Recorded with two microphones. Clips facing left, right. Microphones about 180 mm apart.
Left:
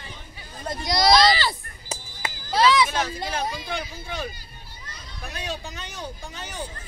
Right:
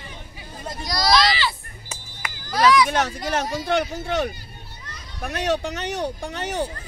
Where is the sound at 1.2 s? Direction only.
40° left (ahead or behind); by 2.8 s 25° left (ahead or behind).